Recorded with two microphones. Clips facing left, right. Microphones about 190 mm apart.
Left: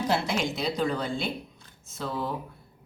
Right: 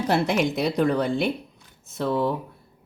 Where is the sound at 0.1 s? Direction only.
60° right (ahead or behind).